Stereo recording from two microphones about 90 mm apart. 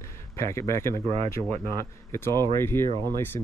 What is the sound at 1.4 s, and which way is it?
Speech, 20° right (ahead or behind).